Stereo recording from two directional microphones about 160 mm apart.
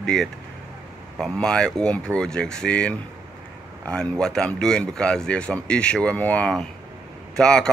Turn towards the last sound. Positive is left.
turn(degrees=5)  # may be behind; listen again after turning